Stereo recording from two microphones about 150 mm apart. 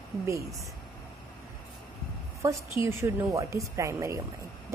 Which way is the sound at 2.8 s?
20° right (ahead or behind).